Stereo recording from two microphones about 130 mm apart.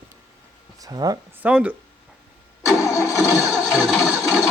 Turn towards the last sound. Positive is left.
turn(degrees=0)  # may be behind; listen again after turning